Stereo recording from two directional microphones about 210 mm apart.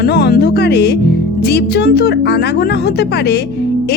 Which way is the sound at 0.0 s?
50° left (ahead or behind).